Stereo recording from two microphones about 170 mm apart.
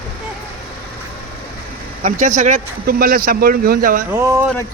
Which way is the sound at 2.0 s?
50° right (ahead or behind).